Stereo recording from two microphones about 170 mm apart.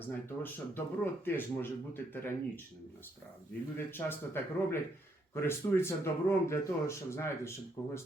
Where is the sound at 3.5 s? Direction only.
10° left (ahead or behind).